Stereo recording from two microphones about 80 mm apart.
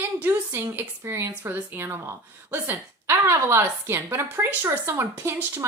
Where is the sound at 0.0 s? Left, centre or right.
Right.